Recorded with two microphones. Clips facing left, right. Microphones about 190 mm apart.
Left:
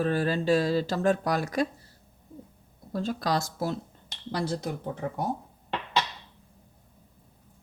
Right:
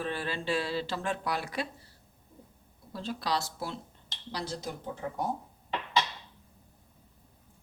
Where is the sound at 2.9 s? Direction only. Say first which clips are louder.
Left 5 dB; 45° left (ahead or behind).